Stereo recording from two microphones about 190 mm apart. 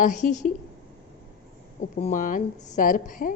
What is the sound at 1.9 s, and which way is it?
Speech, 40° left (ahead or behind).